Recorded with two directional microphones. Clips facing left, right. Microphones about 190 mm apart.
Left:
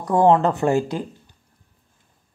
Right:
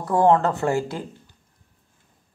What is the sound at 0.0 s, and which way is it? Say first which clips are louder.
Speech: left 2 dB; 20° left (ahead or behind).